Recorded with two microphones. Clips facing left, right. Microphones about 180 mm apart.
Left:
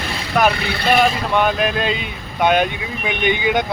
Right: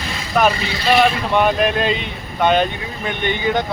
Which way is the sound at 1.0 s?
Centre (ahead or behind).